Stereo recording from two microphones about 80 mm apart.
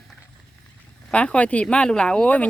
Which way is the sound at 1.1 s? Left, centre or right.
Centre.